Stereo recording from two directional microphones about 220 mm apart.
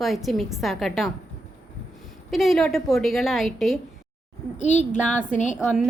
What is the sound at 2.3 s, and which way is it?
A woman's voice, centre (ahead or behind).